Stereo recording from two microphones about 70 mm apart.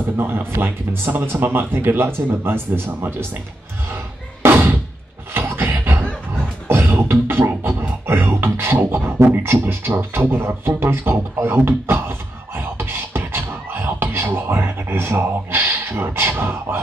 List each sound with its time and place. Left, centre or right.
0.2 s speech: right
3.9 s music: right
5.3 s beatboxing: right